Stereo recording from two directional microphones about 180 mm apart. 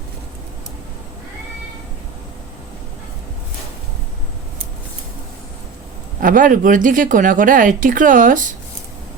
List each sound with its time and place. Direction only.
6.1 s speech: 50° right (ahead or behind)